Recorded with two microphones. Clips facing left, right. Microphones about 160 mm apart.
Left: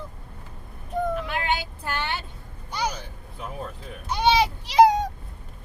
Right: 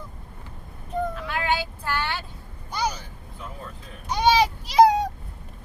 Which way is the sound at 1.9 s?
20° left (ahead or behind).